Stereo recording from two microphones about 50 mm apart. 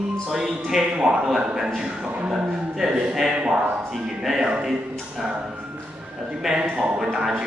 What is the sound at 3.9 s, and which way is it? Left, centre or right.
Speech, centre.